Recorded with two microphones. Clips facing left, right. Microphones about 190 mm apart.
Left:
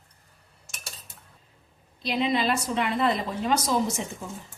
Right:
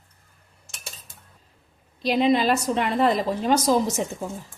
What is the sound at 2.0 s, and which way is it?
Speech, 45° right (ahead or behind).